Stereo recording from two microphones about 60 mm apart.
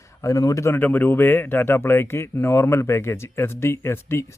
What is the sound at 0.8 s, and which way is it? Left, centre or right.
Speech, left.